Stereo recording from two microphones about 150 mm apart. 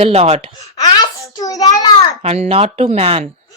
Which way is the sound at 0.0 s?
45° right (ahead or behind).